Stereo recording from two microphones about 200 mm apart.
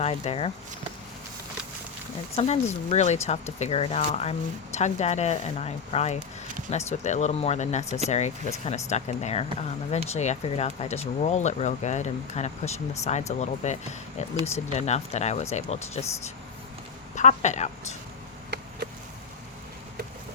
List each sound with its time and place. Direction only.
0.0 s speech: 30° left (ahead or behind)
2.3 s speech: 35° left (ahead or behind)
17.2 s speech: 35° left (ahead or behind)